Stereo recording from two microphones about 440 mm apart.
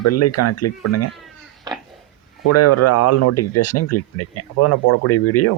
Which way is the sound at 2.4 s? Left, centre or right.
Left.